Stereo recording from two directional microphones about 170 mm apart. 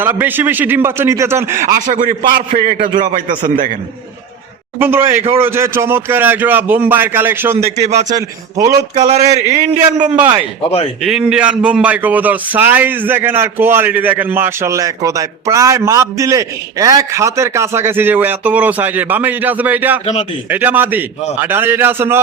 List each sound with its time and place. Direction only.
0.0 s speech: 10° right (ahead or behind)
1.5 s a man's voice: 50° right (ahead or behind)
4.8 s speech: 15° right (ahead or behind)
7.8 s a sound: 40° right (ahead or behind)
8.1 s a man's voice: 20° right (ahead or behind)
9.0 s a sound: 40° right (ahead or behind)
11.0 s speech: 5° right (ahead or behind)